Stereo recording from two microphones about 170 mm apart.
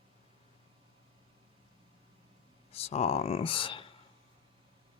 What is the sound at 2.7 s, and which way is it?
Speech, 40° left (ahead or behind).